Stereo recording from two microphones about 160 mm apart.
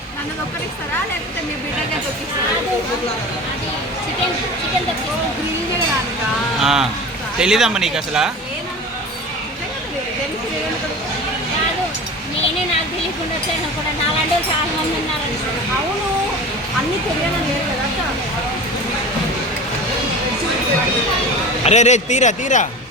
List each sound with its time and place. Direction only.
6.6 s speech: 5° right (ahead or behind)
21.6 s a man's voice: 45° left (ahead or behind)